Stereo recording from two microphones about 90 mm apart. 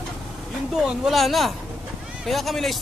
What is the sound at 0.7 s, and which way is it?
Speech, centre (ahead or behind).